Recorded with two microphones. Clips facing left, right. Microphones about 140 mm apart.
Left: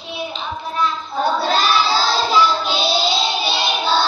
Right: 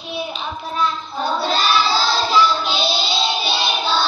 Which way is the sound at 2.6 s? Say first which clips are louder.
Left 2 dB; centre (ahead or behind).